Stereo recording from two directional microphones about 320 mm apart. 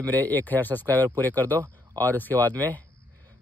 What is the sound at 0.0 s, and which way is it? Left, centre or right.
Speech, centre.